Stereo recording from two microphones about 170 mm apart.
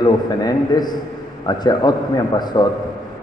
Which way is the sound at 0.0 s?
25° left (ahead or behind).